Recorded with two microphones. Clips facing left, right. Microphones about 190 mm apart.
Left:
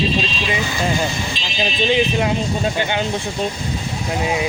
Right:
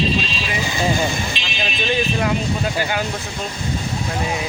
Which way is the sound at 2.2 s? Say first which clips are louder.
Left 1 dB; 25° left (ahead or behind).